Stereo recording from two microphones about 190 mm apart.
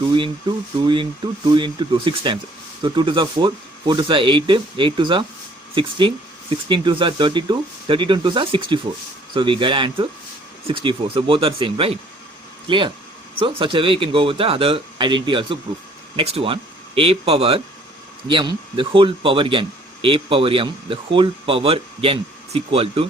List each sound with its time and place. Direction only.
0.9 s speech: 25° right (ahead or behind)